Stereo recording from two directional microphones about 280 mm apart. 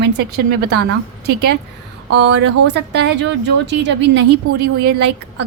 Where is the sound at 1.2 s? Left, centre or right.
Right.